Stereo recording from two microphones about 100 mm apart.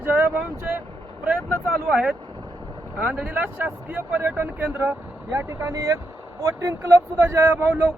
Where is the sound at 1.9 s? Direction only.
5° right (ahead or behind).